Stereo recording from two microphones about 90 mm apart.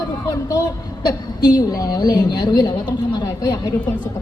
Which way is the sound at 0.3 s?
40° left (ahead or behind).